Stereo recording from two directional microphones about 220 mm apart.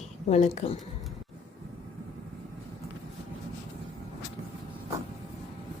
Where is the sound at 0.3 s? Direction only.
30° left (ahead or behind).